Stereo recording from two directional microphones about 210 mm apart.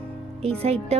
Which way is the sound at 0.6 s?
30° right (ahead or behind).